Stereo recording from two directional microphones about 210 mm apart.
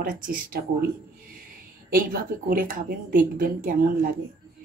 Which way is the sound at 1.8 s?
45° right (ahead or behind).